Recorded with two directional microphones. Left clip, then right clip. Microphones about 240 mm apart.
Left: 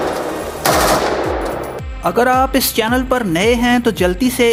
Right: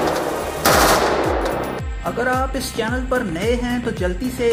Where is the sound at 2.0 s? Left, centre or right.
Left.